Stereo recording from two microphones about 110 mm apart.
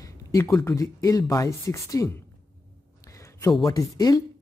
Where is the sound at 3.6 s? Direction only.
35° left (ahead or behind).